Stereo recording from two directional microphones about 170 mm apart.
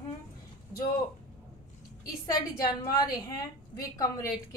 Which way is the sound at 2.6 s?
25° left (ahead or behind).